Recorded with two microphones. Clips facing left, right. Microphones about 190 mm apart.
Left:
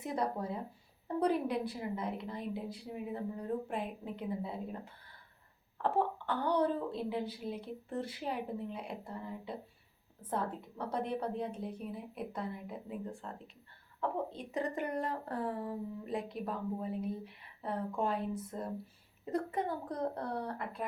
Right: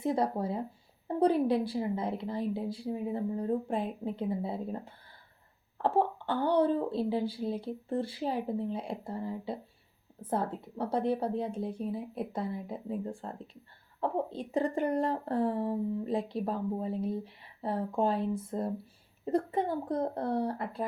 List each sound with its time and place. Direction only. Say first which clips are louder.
0.0 s a woman's voice: right 6 dB; 30° right (ahead or behind)